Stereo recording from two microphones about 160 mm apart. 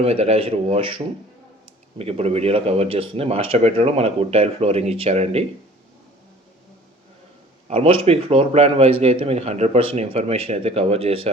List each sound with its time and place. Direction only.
0.0 s speech: 40° right (ahead or behind)
7.7 s speech: 40° right (ahead or behind)